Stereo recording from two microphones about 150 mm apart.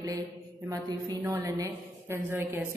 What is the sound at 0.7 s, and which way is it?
Speech, 25° right (ahead or behind).